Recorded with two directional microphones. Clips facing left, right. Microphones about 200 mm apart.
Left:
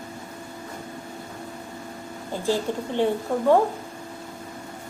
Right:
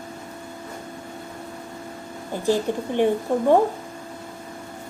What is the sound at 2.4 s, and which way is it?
Speech, 15° right (ahead or behind).